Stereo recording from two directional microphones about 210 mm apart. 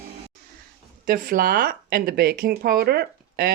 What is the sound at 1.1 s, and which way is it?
Speech, 45° right (ahead or behind).